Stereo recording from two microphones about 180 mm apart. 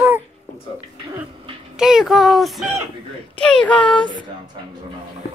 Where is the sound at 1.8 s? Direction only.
5° right (ahead or behind).